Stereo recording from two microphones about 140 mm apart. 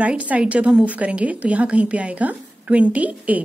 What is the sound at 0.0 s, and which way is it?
A woman's voice, 10° right (ahead or behind).